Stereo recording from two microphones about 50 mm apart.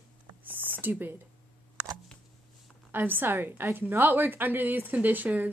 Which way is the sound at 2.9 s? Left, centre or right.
Right.